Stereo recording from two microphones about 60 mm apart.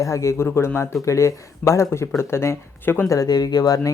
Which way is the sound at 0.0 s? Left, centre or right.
Left.